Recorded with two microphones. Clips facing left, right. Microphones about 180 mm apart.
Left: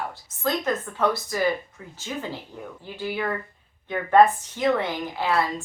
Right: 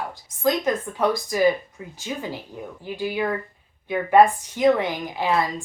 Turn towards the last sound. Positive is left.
turn(degrees=-15)  # may be behind; listen again after turning